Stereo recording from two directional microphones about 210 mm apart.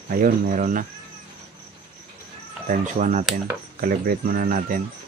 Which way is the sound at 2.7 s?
35° right (ahead or behind).